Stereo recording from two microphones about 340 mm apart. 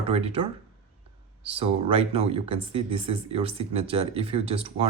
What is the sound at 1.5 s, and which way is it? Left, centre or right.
Speech, centre.